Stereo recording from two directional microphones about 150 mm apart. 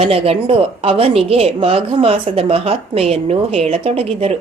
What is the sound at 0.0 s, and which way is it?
A woman's voice, 40° right (ahead or behind).